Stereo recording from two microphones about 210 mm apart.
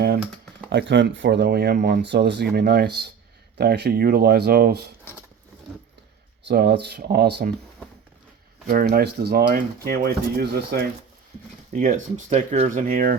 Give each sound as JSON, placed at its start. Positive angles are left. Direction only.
{"t": 0.7, "sound": "speech", "side_deg": -55}
{"t": 6.5, "sound": "speech", "side_deg": -50}
{"t": 8.7, "sound": "speech", "side_deg": -45}
{"t": 11.7, "sound": "speech", "side_deg": -40}